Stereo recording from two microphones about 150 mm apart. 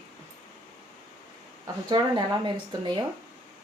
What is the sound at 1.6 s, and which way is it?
Speech, 30° right (ahead or behind).